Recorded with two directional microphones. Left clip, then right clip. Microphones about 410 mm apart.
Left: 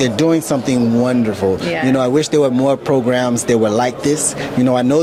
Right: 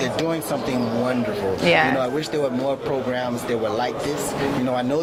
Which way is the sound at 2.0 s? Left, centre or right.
Left.